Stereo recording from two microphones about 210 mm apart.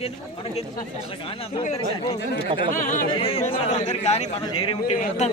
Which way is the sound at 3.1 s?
25° left (ahead or behind).